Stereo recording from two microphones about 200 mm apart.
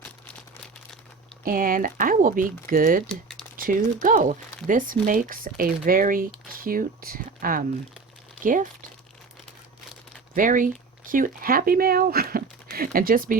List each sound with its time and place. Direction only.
1.5 s speech: 45° right (ahead or behind)
10.3 s speech: 40° right (ahead or behind)